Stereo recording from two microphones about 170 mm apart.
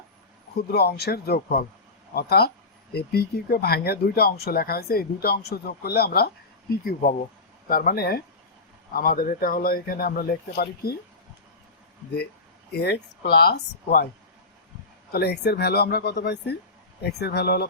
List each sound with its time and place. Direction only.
0.7 s speech: 70° left (ahead or behind)
12.7 s speech: 70° left (ahead or behind)
15.1 s speech: 70° left (ahead or behind)